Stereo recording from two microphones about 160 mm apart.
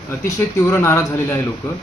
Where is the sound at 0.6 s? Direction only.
15° left (ahead or behind).